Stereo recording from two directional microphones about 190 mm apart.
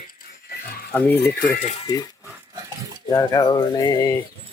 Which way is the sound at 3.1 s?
15° left (ahead or behind).